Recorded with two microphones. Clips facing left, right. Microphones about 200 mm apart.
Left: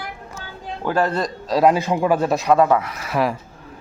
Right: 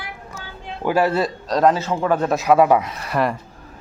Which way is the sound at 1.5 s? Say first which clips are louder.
Left 1 dB; 10° left (ahead or behind).